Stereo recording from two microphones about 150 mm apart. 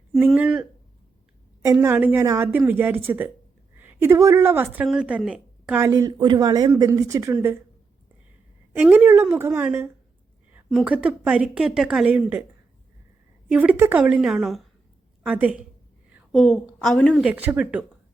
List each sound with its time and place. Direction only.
0.1 s speech: 5° right (ahead or behind)
1.6 s a woman's voice: 20° right (ahead or behind)
5.9 s speech: 25° right (ahead or behind)
8.7 s speech: 10° right (ahead or behind)
13.5 s a woman's voice: 10° right (ahead or behind)
16.3 s a woman's voice: 5° left (ahead or behind)
17.2 s speech: 10° right (ahead or behind)